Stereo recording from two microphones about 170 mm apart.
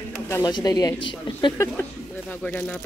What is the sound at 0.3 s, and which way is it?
Speech, 25° left (ahead or behind).